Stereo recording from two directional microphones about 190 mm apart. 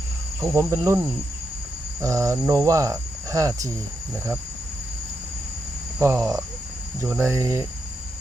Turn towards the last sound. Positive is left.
turn(degrees=-15)  # may be behind; listen again after turning